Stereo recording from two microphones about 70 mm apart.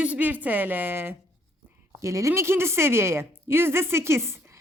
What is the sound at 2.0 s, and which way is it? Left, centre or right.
A woman's voice, right.